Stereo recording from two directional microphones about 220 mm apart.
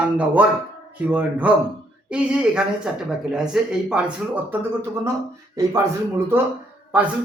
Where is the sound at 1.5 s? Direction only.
5° right (ahead or behind).